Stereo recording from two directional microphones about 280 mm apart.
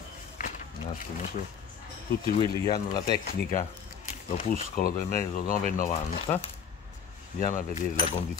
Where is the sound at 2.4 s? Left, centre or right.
Centre.